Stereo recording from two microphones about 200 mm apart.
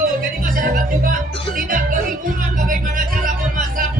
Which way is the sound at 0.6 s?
45° right (ahead or behind).